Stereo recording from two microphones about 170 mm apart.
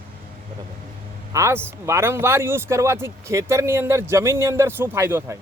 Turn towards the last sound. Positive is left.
turn(degrees=-15)  # may be behind; listen again after turning